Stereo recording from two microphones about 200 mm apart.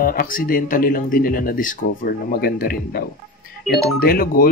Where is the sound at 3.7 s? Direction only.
Centre (ahead or behind).